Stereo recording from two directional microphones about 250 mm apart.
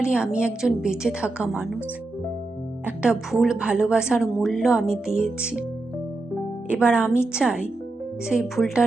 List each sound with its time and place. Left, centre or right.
0.1 s speech: centre
2.8 s a woman's voice: centre
6.7 s speech: centre